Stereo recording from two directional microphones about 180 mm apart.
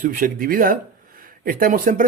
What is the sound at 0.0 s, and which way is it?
Speech, 50° right (ahead or behind).